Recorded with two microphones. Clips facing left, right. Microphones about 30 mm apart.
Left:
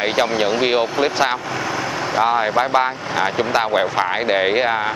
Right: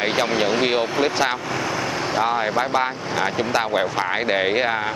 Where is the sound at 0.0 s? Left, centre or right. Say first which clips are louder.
Left 2 dB; centre.